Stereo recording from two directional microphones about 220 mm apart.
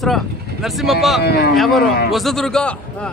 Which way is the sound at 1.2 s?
45° left (ahead or behind).